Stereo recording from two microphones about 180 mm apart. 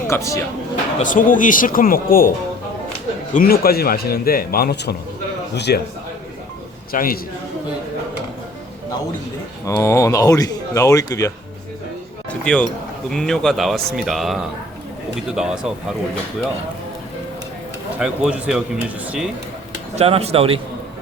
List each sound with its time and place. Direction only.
0.1 s speech: 15° left (ahead or behind)
0.9 s speech: 45° left (ahead or behind)
3.3 s a man's voice: 55° left (ahead or behind)
6.9 s speech: 50° left (ahead or behind)
9.6 s speech: 15° left (ahead or behind)
12.3 s basketball bounce: 5° left (ahead or behind)
13.1 s speech: 5° left (ahead or behind)
18.0 s speech: 5° right (ahead or behind)
20.0 s speech: 35° right (ahead or behind)